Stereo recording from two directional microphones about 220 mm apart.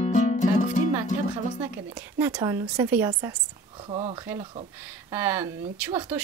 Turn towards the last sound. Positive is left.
turn(degrees=-10)  # may be behind; listen again after turning